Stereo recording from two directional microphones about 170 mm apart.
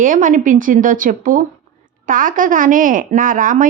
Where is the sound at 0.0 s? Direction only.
50° right (ahead or behind).